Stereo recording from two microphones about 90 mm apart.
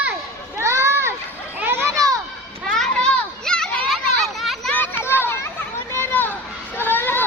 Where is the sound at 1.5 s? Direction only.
25° right (ahead or behind).